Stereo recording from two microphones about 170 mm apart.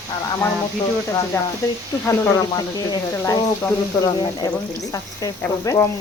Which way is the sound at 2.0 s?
20° left (ahead or behind).